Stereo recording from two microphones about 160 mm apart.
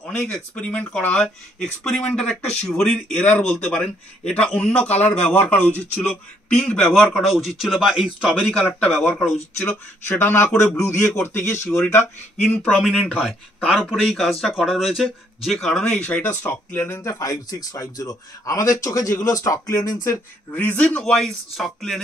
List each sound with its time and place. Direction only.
0.1 s a man's voice: 5° left (ahead or behind)
8.5 s a man's voice: 10° left (ahead or behind)